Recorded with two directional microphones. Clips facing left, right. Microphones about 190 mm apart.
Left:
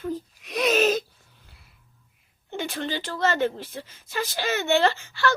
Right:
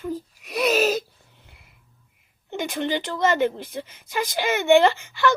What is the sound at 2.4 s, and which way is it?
Speech, 15° right (ahead or behind).